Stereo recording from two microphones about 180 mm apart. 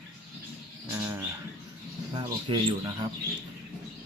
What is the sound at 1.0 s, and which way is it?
Bird, 15° right (ahead or behind).